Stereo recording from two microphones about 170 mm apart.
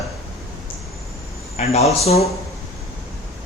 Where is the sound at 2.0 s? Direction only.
40° left (ahead or behind).